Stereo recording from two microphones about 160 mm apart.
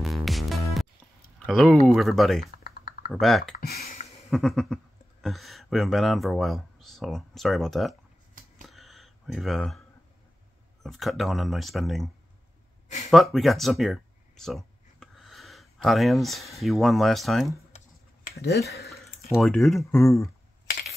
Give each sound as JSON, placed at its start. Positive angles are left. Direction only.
{"t": 0.0, "sound": "music", "side_deg": 0}
{"t": 1.4, "sound": "speech", "side_deg": 0}
{"t": 2.6, "sound": "typing", "side_deg": 65}
{"t": 3.1, "sound": "speech", "side_deg": 0}
{"t": 3.5, "sound": "speech", "side_deg": 75}
{"t": 4.3, "sound": "speech", "side_deg": 0}
{"t": 8.6, "sound": "a sound", "side_deg": 0}
{"t": 10.8, "sound": "speech", "side_deg": 0}
{"t": 12.8, "sound": "a sound", "side_deg": 45}
{"t": 13.1, "sound": "speech", "side_deg": 0}
{"t": 18.3, "sound": "speech", "side_deg": 90}
{"t": 19.3, "sound": "speech", "side_deg": 0}
{"t": 19.9, "sound": "speech", "side_deg": 20}